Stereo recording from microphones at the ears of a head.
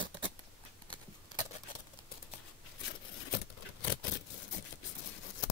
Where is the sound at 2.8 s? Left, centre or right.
Left.